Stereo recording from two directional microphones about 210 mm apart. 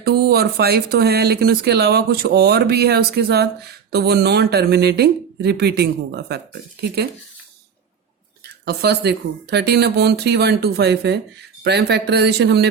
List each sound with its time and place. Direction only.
0.0 s speech: 50° right (ahead or behind)
8.4 s speech: 50° right (ahead or behind)